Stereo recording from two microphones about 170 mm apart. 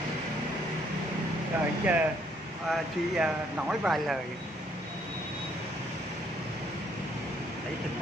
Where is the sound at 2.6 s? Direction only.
5° right (ahead or behind).